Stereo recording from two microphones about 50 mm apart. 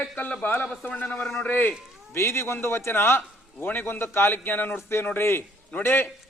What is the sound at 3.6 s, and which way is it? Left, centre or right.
A man's voice, left.